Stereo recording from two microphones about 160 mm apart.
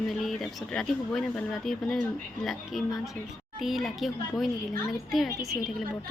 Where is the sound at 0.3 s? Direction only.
Centre (ahead or behind).